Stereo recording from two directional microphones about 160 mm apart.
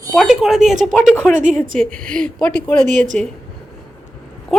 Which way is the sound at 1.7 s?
5° left (ahead or behind).